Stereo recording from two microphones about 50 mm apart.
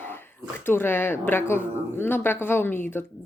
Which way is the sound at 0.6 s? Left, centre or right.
Left.